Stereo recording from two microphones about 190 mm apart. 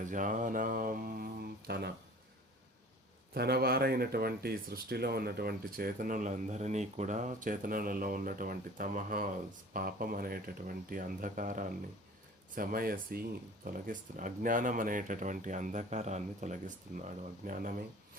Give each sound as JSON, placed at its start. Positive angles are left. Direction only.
{"t": 0.0, "sound": "mantra", "side_deg": -45}
{"t": 3.3, "sound": "speech", "side_deg": -55}